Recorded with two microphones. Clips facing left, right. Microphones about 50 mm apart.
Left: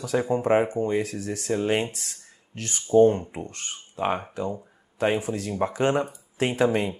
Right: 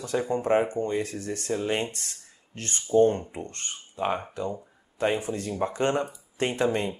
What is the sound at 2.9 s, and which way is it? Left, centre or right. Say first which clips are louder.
Speech: left 3 dB; centre.